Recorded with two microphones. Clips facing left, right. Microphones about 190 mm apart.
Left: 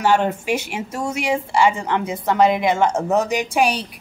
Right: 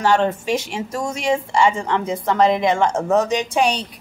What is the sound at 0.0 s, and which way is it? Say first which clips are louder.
Speech: even; 5° left (ahead or behind).